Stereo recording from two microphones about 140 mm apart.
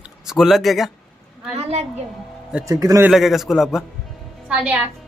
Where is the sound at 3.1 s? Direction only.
Centre (ahead or behind).